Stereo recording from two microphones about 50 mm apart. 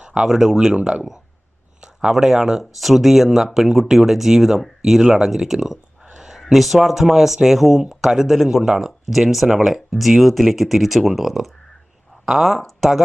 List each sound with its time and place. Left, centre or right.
0.0 s speech: centre